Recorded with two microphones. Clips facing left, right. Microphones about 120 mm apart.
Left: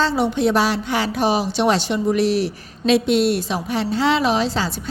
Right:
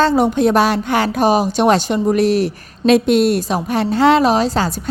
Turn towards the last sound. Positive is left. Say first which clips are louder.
# right 4 dB
turn(degrees=-45)  # may be behind; listen again after turning